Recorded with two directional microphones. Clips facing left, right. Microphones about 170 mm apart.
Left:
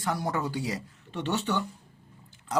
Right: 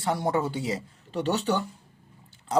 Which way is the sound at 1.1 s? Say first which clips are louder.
Right 4 dB; 35° right (ahead or behind).